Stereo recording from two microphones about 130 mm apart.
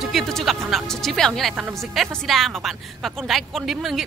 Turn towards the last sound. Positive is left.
turn(degrees=0)  # may be behind; listen again after turning